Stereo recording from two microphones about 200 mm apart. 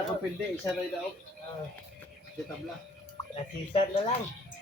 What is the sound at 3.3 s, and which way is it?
Speech, 30° left (ahead or behind).